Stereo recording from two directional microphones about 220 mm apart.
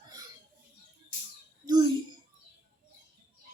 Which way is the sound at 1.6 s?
15° right (ahead or behind).